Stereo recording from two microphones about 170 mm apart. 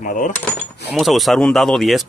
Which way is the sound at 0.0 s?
50° left (ahead or behind).